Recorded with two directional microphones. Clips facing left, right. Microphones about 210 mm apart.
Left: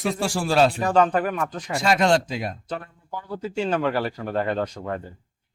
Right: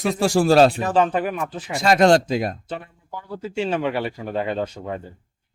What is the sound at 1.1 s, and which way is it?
Speech, 5° right (ahead or behind).